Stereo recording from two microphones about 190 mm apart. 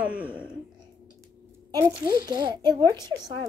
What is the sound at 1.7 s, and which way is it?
Speech, 20° right (ahead or behind).